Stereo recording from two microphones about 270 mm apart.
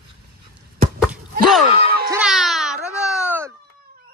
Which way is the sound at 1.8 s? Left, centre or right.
Right.